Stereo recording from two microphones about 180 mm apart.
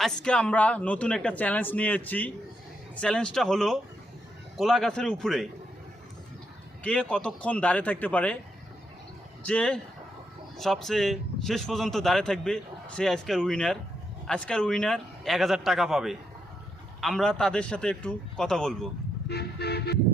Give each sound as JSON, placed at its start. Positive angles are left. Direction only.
{"t": 0.0, "sound": "a man's voice", "side_deg": 5}
{"t": 6.8, "sound": "a man's voice", "side_deg": 5}
{"t": 9.4, "sound": "a man's voice", "side_deg": 5}
{"t": 19.3, "sound": "vehicle", "side_deg": 65}